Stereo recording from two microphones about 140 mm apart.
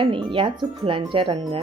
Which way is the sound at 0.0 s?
40° right (ahead or behind).